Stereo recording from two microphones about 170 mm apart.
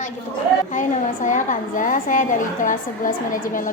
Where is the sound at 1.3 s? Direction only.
50° left (ahead or behind).